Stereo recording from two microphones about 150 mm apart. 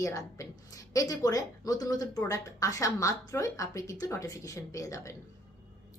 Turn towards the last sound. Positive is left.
turn(degrees=20)  # may be behind; listen again after turning